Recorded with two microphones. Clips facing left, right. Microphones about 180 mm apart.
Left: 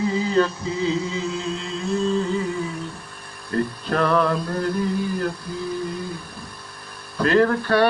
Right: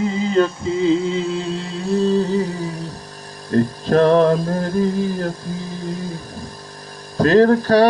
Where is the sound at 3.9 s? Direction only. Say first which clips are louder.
Right 7 dB; 40° right (ahead or behind).